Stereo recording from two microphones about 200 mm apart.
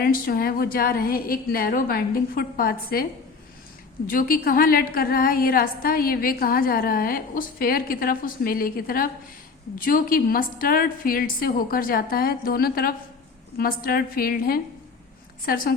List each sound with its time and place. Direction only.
0.0 s a woman's voice: 50° left (ahead or behind)